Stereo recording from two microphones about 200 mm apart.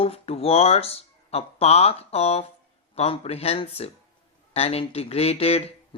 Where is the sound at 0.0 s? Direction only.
30° left (ahead or behind).